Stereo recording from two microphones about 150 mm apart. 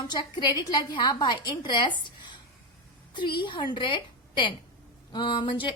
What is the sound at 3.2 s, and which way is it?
A woman's voice, 30° left (ahead or behind).